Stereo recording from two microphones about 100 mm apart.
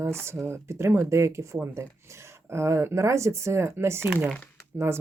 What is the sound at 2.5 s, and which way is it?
Speech, 30° right (ahead or behind).